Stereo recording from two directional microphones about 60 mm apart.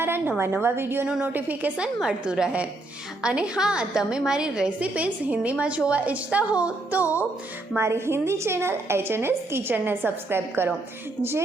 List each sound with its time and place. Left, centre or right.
0.0 s a woman's voice: right
1.0 s a woman's voice: centre
1.3 s a woman's voice: right
1.8 s a woman's voice: centre
7.8 s a woman's voice: right